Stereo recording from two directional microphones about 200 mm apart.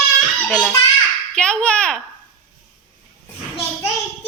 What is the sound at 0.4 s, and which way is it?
A woman's voice, 5° left (ahead or behind).